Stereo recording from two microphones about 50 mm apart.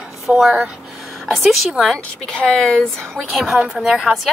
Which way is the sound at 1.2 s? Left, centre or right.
Centre.